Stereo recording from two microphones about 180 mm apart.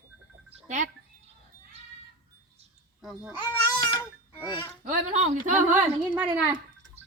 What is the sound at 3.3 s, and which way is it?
Cat, 25° left (ahead or behind).